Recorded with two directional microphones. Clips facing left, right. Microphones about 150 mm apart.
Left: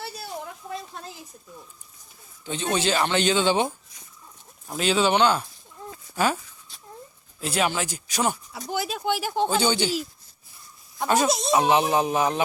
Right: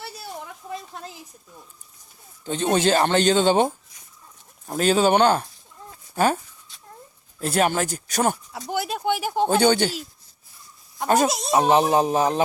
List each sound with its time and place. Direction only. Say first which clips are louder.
2.4 s speech: right 5 dB; 45° right (ahead or behind)
8.7 s speech: right 2 dB; 60° right (ahead or behind)
11.0 s speech: right 3 dB; 45° right (ahead or behind)
11.3 s speech: left 3 dB; 5° right (ahead or behind)
11.5 s speech: right 3 dB; 40° right (ahead or behind)